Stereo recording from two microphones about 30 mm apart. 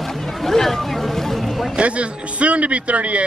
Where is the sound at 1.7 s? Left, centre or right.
Right.